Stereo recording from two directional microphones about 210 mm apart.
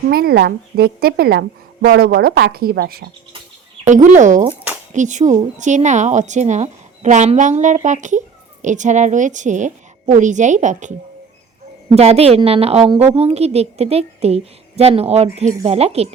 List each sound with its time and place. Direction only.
0.1 s a woman's voice: 45° right (ahead or behind)
3.8 s speech: 35° right (ahead or behind)
11.9 s a woman's voice: 30° right (ahead or behind)